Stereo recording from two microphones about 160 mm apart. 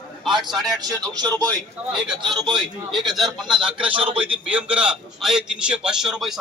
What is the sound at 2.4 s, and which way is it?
A man's voice, 30° right (ahead or behind).